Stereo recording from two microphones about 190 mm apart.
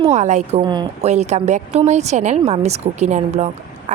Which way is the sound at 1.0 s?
35° right (ahead or behind).